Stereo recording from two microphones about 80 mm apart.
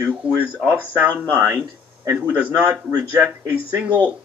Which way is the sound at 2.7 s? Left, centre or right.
Right.